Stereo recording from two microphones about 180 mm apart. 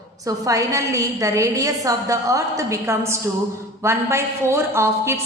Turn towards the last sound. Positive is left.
turn(degrees=-15)  # may be behind; listen again after turning